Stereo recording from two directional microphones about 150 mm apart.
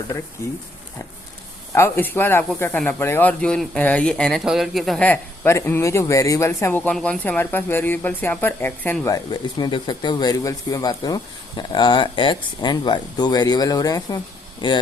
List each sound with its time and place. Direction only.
0.4 s speech: 20° left (ahead or behind)
1.7 s speech: 15° left (ahead or behind); by 14.8 s 30° left (ahead or behind)